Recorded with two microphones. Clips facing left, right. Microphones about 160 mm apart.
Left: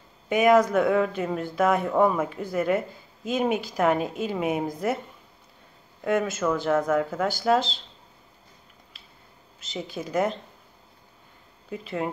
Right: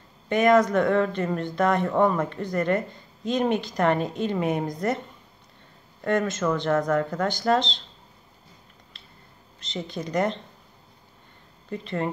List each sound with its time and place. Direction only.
0.3 s speech: 5° left (ahead or behind)
9.6 s speech: 5° left (ahead or behind)
11.7 s speech: 5° left (ahead or behind)